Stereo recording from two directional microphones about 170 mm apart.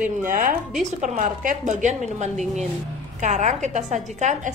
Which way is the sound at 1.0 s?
45° right (ahead or behind).